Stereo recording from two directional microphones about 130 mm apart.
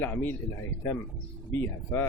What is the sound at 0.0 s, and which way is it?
Speech, 15° left (ahead or behind).